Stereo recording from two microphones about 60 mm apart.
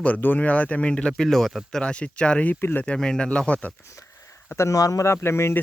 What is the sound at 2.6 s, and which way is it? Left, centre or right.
Speech, left.